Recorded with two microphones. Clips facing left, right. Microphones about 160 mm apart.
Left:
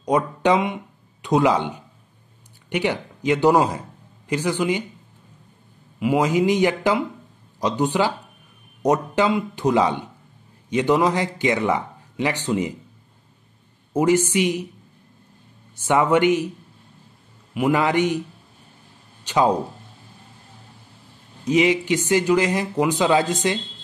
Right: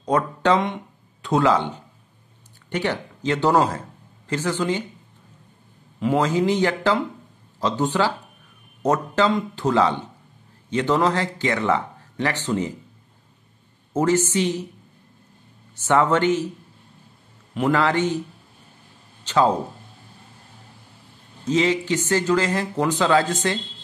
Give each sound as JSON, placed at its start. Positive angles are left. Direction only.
{"t": 0.0, "sound": "speech", "side_deg": 15}
{"t": 5.9, "sound": "speech", "side_deg": 10}
{"t": 13.9, "sound": "speech", "side_deg": 10}
{"t": 15.8, "sound": "speech", "side_deg": 15}
{"t": 17.6, "sound": "speech", "side_deg": 15}
{"t": 19.2, "sound": "speech", "side_deg": 15}
{"t": 21.5, "sound": "speech", "side_deg": 15}